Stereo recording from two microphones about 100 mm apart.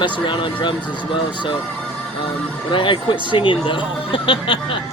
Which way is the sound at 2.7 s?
55° left (ahead or behind).